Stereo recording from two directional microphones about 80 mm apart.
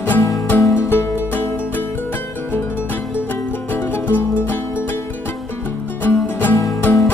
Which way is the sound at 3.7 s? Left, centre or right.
Left.